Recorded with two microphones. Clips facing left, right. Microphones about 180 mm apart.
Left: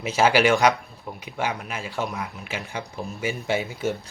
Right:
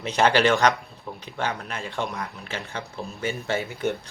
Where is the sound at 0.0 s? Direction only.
5° left (ahead or behind).